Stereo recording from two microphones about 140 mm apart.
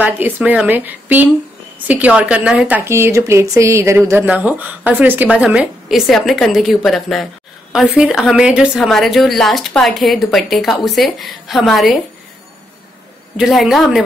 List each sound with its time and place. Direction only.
0.0 s a woman's voice: 10° right (ahead or behind)
13.4 s a woman's voice: centre (ahead or behind)